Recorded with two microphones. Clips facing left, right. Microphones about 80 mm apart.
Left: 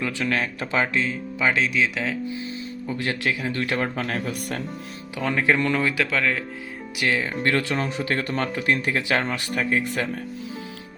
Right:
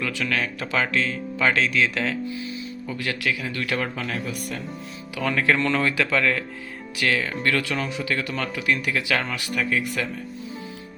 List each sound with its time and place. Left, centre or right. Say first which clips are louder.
0.0 s speech: left 1 dB; left
1.0 s speech: right 1 dB; centre
2.2 s speech: even; left
4.2 s speech: left 2 dB; left
5.2 s speech: even; centre
7.0 s speech: even; left